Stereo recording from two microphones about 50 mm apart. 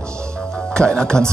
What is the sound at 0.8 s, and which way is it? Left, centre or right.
Speech, centre.